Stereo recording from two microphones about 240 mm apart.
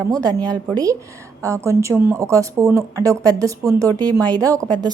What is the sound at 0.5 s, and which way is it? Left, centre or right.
Speech, centre.